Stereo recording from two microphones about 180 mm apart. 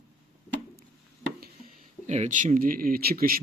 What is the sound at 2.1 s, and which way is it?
Speech, 40° right (ahead or behind).